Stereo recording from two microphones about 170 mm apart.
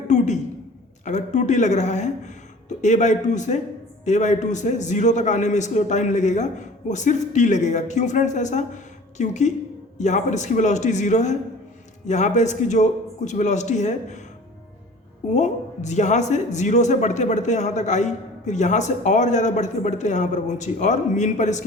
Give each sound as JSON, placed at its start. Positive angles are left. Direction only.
{"t": 1.0, "sound": "speech", "side_deg": 45}
{"t": 15.3, "sound": "speech", "side_deg": 45}